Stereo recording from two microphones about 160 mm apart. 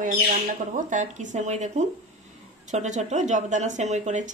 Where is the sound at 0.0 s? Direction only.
55° right (ahead or behind).